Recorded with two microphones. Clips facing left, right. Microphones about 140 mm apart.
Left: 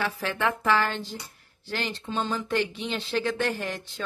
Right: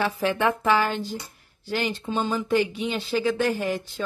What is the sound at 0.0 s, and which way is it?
A woman's voice, 15° right (ahead or behind).